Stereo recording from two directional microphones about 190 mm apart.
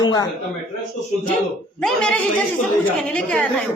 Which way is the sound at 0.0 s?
20° left (ahead or behind).